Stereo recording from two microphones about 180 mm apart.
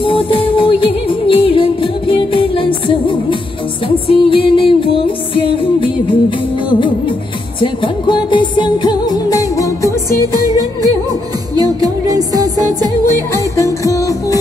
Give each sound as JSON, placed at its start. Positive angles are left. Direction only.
{"t": 0.0, "sound": "music", "side_deg": 30}
{"t": 7.6, "sound": "music", "side_deg": 25}
{"t": 10.3, "sound": "music", "side_deg": -20}
{"t": 13.3, "sound": "music", "side_deg": 15}